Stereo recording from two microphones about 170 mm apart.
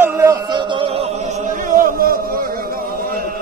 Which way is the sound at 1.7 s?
55° right (ahead or behind).